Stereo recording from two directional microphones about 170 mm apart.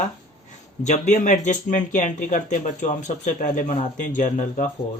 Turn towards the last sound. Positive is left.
turn(degrees=50)  # may be behind; listen again after turning